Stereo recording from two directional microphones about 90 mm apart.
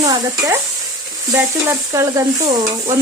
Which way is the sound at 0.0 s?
40° right (ahead or behind).